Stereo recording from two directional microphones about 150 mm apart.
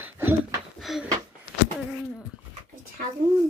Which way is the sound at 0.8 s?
Centre (ahead or behind).